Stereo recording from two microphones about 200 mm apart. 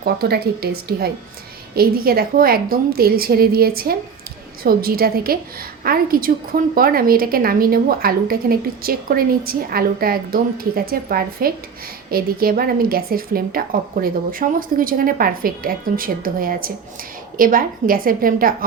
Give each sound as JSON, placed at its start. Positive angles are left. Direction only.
{"t": 0.0, "sound": "a woman's voice", "side_deg": -50}